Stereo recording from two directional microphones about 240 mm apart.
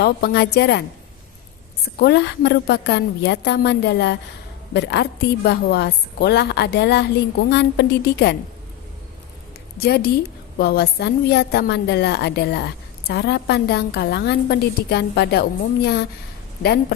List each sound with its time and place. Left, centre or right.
0.0 s a woman's voice: left
9.8 s a woman's voice: left